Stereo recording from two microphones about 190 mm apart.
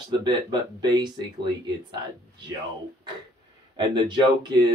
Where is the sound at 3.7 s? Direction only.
25° right (ahead or behind).